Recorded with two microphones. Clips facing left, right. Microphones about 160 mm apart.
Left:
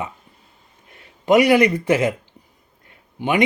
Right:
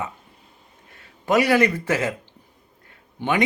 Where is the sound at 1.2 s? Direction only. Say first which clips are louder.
Left 4 dB; 20° left (ahead or behind).